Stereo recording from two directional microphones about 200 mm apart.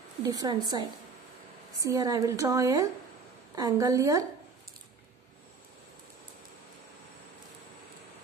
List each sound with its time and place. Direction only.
0.2 s a woman's voice: 20° right (ahead or behind)